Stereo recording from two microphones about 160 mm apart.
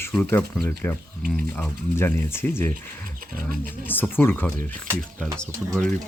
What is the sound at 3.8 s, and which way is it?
Speech, 10° left (ahead or behind).